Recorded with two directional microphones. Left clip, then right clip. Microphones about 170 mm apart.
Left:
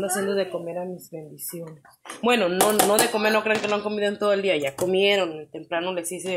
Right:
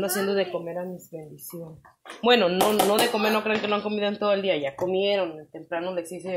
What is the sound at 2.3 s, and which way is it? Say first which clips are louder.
Speech: left 1 dB; centre (ahead or behind).